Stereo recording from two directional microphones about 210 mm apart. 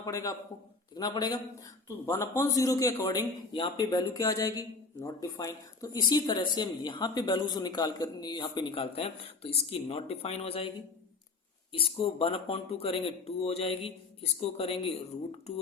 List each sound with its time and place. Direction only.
0.0 s a man's voice: 15° left (ahead or behind)
11.7 s a woman's voice: 25° left (ahead or behind)